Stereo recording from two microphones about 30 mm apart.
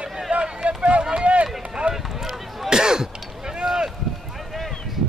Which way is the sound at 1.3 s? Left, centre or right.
Right.